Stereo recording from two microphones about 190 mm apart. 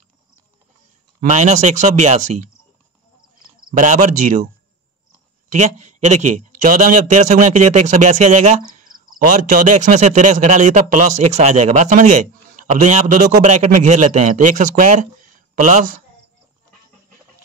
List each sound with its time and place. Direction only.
1.2 s speech: 40° right (ahead or behind)
3.7 s speech: 40° right (ahead or behind)
5.5 s speech: 40° right (ahead or behind)